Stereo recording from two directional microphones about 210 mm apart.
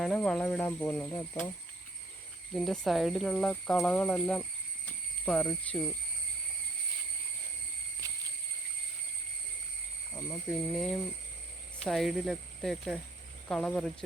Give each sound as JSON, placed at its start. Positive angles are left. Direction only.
{"t": 0.0, "sound": "speech", "side_deg": 5}
{"t": 2.5, "sound": "speech", "side_deg": 0}
{"t": 8.0, "sound": "a sound", "side_deg": -15}
{"t": 10.5, "sound": "speech", "side_deg": 0}